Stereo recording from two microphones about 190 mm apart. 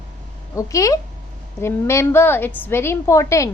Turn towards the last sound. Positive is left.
turn(degrees=15)  # may be behind; listen again after turning